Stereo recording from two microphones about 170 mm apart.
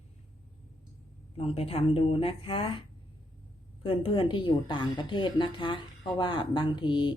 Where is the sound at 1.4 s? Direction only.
35° left (ahead or behind).